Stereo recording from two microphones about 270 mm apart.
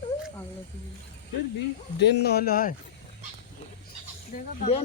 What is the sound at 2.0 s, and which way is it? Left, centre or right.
Speech, left.